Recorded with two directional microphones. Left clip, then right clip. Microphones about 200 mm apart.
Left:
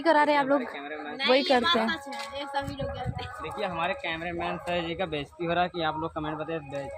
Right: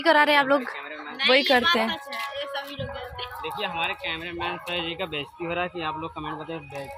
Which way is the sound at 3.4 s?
60° left (ahead or behind).